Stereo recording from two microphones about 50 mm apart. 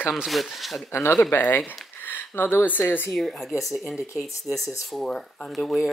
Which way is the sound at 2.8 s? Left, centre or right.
Left.